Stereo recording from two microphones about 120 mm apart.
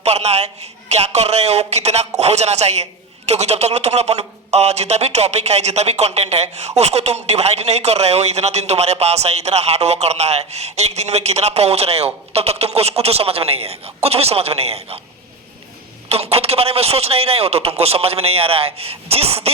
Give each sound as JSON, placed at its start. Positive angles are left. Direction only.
{"t": 0.0, "sound": "speech", "side_deg": -60}
{"t": 16.0, "sound": "speech", "side_deg": -55}